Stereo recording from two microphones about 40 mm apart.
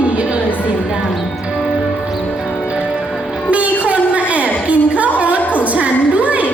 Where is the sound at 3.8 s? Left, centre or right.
Right.